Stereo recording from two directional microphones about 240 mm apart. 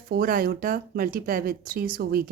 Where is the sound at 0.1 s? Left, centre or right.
Right.